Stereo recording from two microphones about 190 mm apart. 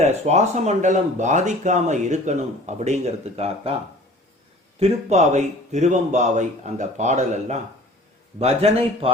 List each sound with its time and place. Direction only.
0.0 s speech: 35° right (ahead or behind)
4.8 s speech: 35° right (ahead or behind)